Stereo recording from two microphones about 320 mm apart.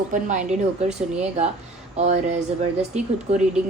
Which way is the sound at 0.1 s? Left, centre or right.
Right.